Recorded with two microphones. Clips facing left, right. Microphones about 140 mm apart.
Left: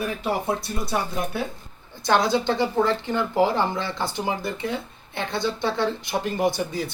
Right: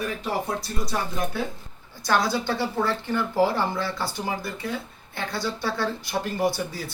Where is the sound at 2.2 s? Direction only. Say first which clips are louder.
Left 4 dB; 20° left (ahead or behind).